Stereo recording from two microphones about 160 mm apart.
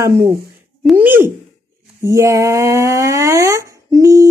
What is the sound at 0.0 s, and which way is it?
Speech, 15° right (ahead or behind).